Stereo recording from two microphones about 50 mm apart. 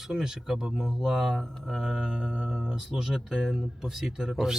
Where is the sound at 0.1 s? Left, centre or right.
Centre.